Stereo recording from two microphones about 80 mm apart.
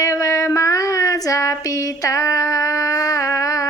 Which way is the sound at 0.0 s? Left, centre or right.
Left.